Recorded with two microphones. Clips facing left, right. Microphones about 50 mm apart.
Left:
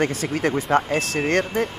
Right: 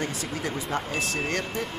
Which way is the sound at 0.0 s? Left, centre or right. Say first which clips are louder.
Left 8 dB; left.